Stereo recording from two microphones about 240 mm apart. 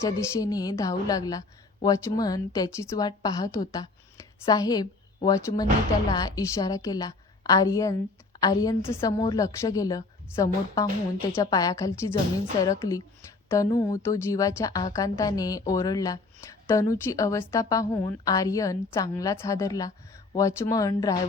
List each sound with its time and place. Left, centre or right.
0.0 s a woman's voice: centre